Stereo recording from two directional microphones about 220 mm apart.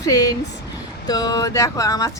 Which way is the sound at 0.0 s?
15° left (ahead or behind).